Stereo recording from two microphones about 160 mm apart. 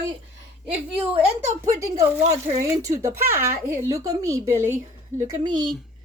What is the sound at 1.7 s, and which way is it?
Speech, 20° right (ahead or behind).